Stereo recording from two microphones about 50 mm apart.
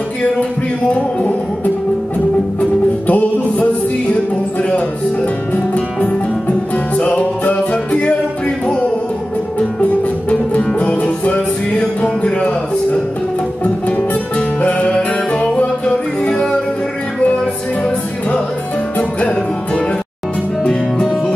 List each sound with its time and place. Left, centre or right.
0.4 s music: left
5.8 s music: centre
9.6 s music: left
13.8 s music: left
18.9 s music: left
20.6 s music: centre